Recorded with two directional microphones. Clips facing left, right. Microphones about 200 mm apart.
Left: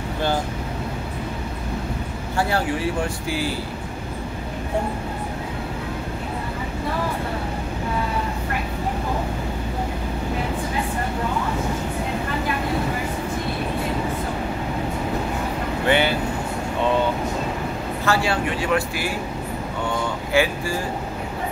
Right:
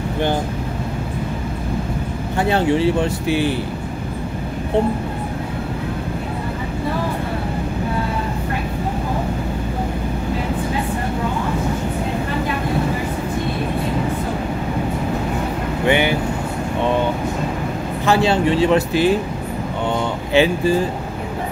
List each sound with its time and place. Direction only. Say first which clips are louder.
2.3 s speech: right 6 dB; 20° right (ahead or behind)
15.9 s vehicle: right 2 dB; 15° right (ahead or behind)
18.0 s speech: right 6 dB; 20° right (ahead or behind)
20.3 s speech: right 5 dB; 20° right (ahead or behind)